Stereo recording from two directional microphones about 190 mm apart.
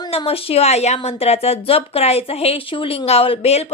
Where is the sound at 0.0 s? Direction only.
25° left (ahead or behind).